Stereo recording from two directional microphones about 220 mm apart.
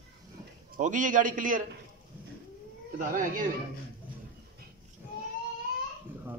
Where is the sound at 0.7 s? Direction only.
35° right (ahead or behind).